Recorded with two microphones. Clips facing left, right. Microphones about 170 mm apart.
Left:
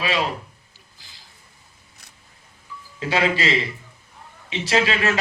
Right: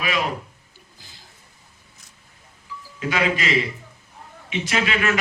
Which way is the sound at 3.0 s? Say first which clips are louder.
Left 2 dB; 30° left (ahead or behind).